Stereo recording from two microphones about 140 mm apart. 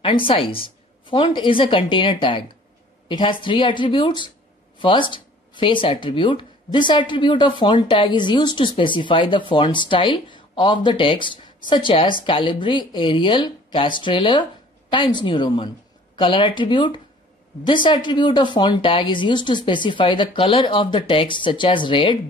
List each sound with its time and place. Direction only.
0.0 s speech: 40° left (ahead or behind)